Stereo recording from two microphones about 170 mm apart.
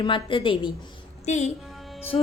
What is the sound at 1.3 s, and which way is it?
Speech, 45° left (ahead or behind).